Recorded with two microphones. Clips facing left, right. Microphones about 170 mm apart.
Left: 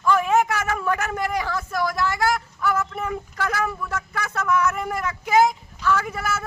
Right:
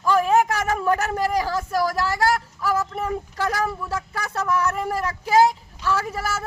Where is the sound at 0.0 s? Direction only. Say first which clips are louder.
Right 1 dB; 35° right (ahead or behind).